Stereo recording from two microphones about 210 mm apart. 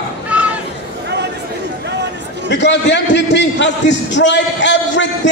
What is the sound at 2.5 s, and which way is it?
A man's voice, 55° left (ahead or behind).